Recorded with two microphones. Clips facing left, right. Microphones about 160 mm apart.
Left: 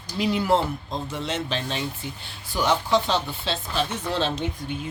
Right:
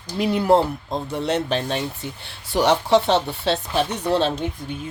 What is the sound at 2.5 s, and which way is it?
Speech, 70° right (ahead or behind).